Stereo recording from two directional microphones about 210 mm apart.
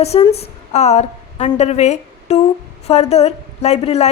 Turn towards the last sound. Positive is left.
turn(degrees=30)  # may be behind; listen again after turning